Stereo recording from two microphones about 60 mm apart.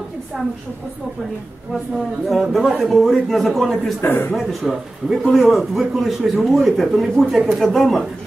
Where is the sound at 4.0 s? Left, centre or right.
Left.